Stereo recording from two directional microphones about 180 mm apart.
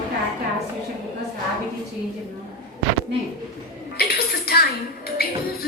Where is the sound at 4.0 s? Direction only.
60° left (ahead or behind).